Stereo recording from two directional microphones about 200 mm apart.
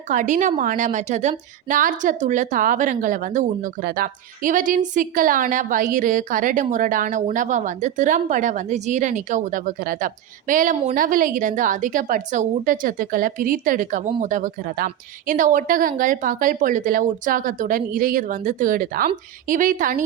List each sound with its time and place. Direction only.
0.1 s a woman's voice: 40° right (ahead or behind)